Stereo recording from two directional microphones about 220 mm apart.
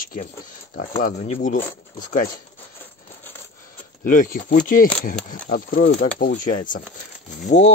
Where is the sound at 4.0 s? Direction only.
40° left (ahead or behind).